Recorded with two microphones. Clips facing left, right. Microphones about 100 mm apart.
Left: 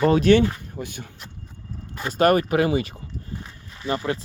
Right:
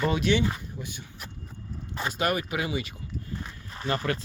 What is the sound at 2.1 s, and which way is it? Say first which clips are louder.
Speech: left 11 dB; 45° left (ahead or behind).